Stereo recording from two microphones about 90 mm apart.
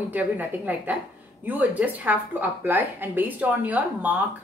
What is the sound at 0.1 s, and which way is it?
A woman's voice, 20° right (ahead or behind).